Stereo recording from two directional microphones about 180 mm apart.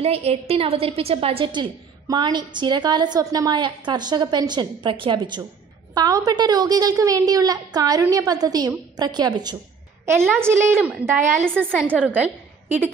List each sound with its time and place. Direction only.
0.0 s a woman's voice: 35° right (ahead or behind); by 12.9 s 10° right (ahead or behind)